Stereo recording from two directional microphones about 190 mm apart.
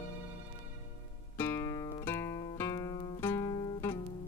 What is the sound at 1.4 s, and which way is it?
Guitar, 15° left (ahead or behind).